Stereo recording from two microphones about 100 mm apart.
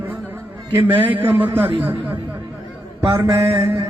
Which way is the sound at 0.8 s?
15° right (ahead or behind).